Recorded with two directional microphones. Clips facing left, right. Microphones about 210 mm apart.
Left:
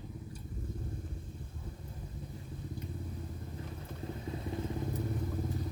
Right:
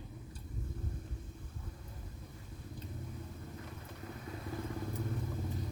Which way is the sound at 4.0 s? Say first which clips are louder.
Left 5 dB; 25° left (ahead or behind).